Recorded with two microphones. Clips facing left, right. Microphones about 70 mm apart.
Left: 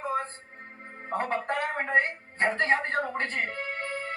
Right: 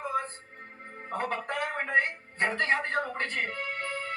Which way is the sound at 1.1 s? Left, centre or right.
Left.